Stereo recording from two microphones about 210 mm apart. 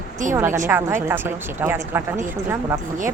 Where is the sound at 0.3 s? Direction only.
10° right (ahead or behind).